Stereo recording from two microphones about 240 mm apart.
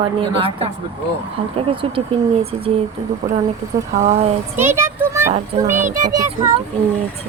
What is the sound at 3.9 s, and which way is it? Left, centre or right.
Speech, right.